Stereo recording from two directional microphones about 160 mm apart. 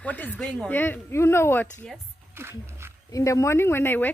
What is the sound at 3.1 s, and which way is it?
Speech, 20° left (ahead or behind).